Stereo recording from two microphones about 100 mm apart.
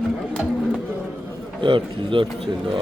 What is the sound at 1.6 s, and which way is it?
Speech, 55° right (ahead or behind).